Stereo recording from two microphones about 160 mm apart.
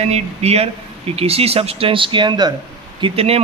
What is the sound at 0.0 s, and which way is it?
A man's voice, 40° right (ahead or behind).